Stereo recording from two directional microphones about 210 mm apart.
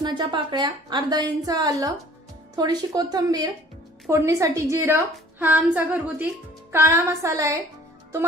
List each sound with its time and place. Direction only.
0.0 s a woman's voice: 20° right (ahead or behind)